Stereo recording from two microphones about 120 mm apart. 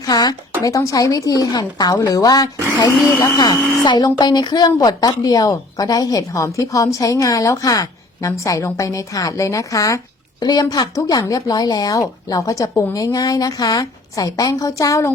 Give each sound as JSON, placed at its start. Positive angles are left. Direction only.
{"t": 0.0, "sound": "a woman's voice", "side_deg": 35}